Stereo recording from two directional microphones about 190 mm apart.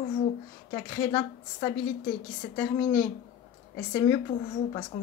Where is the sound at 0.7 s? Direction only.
20° left (ahead or behind).